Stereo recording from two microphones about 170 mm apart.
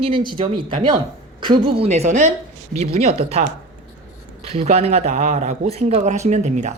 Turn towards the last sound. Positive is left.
turn(degrees=-45)  # may be behind; listen again after turning